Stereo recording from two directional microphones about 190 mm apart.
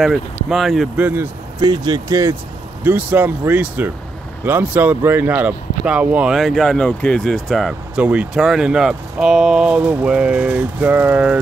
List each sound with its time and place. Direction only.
0.0 s speech: centre (ahead or behind)
1.6 s speech: 25° right (ahead or behind)